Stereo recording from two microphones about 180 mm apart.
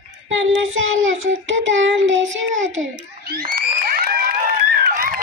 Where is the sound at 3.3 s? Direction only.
55° right (ahead or behind).